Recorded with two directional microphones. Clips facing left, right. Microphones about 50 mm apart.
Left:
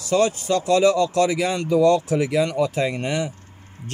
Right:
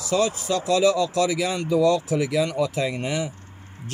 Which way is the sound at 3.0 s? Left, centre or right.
Left.